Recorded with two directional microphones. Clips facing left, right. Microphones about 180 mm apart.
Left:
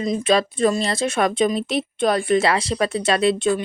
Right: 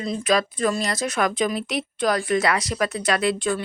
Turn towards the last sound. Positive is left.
turn(degrees=25)  # may be behind; listen again after turning